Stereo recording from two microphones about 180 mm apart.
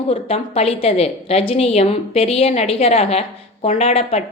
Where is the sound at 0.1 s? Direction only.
35° left (ahead or behind).